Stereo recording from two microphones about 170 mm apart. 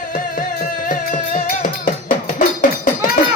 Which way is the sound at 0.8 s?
55° left (ahead or behind).